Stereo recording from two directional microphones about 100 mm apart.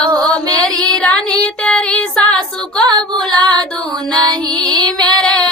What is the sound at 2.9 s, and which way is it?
Music, 45° right (ahead or behind).